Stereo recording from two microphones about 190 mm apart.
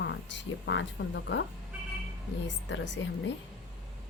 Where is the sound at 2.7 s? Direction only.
70° left (ahead or behind).